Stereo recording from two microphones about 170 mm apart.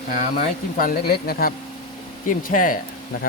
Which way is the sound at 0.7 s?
60° left (ahead or behind).